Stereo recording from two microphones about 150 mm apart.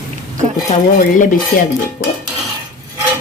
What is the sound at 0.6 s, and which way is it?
Speech, 60° left (ahead or behind).